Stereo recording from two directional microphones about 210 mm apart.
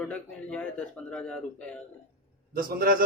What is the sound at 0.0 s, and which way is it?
Speech, 5° left (ahead or behind).